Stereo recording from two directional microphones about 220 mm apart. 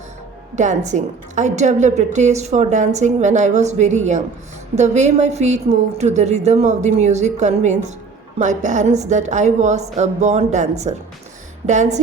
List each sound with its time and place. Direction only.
0.5 s a woman's voice: 35° right (ahead or behind)